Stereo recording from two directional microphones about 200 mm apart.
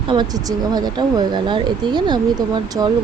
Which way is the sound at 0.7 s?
20° right (ahead or behind).